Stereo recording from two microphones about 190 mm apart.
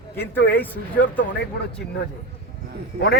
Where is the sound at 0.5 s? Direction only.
10° left (ahead or behind).